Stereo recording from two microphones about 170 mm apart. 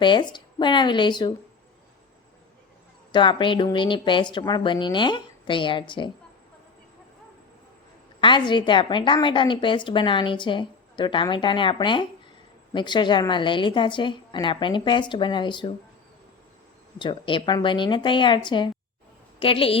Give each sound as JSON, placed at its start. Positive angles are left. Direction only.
{"t": 0.0, "sound": "a woman's voice", "side_deg": 25}
{"t": 3.1, "sound": "a woman's voice", "side_deg": 30}
{"t": 8.2, "sound": "a woman's voice", "side_deg": 25}
{"t": 17.0, "sound": "a woman's voice", "side_deg": 30}